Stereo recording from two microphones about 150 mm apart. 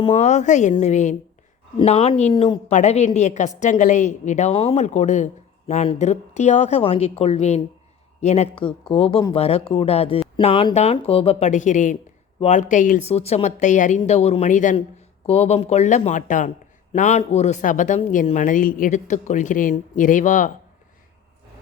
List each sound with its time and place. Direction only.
0.0 s speech: 45° left (ahead or behind)
8.9 s a man's voice: 40° left (ahead or behind); by 13.0 s 60° left (ahead or behind)
13.1 s speech: 45° left (ahead or behind)
14.0 s speech: 45° left (ahead or behind)
15.3 s a man's voice: 45° left (ahead or behind)